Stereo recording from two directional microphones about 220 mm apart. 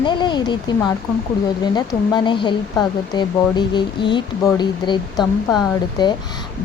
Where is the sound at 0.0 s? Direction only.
20° left (ahead or behind).